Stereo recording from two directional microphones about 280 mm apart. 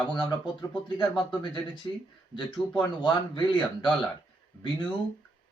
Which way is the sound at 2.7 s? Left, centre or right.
Centre.